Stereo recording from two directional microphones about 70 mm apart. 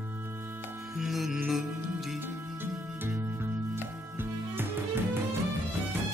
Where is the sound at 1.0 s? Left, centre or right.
Centre.